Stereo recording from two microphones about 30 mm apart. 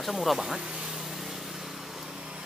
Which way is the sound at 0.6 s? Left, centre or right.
Right.